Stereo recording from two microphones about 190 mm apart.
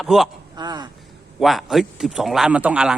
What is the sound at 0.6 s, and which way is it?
Speech, 20° right (ahead or behind).